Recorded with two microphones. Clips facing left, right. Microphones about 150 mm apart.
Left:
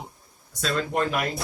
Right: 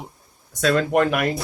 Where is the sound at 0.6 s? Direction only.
70° right (ahead or behind).